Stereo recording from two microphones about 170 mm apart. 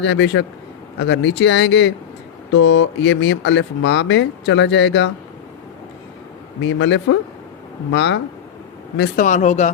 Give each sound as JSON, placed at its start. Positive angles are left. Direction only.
{"t": 0.0, "sound": "speech", "side_deg": 90}
{"t": 6.6, "sound": "speech", "side_deg": 90}
{"t": 9.1, "sound": "speech", "side_deg": 45}